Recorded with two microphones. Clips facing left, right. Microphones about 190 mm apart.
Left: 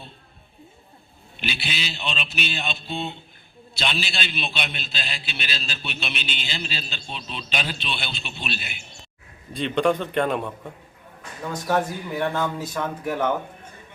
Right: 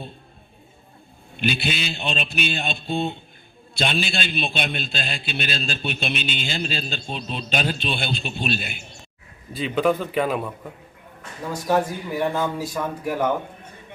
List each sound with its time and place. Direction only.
1.4 s a man's voice: 50° right (ahead or behind)
9.5 s a man's voice: 5° right (ahead or behind)